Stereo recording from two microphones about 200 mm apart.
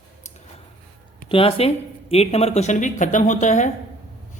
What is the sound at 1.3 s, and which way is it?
Speech, 30° left (ahead or behind).